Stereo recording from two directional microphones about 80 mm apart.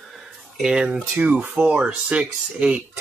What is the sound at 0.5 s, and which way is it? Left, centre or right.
Speech, centre.